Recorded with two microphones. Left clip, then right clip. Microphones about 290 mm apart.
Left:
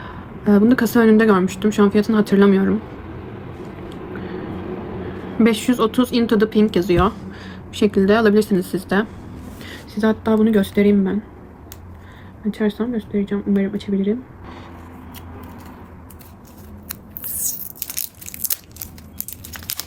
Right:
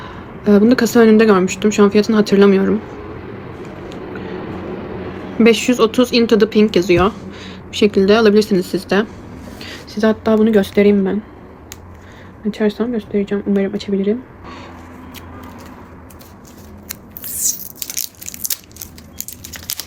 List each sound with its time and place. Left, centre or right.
0.4 s speech: centre
5.4 s speech: centre
12.5 s speech: centre
17.4 s a sound: left
19.5 s typing: left